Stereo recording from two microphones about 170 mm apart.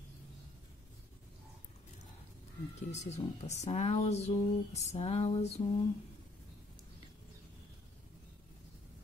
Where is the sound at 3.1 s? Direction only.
40° left (ahead or behind).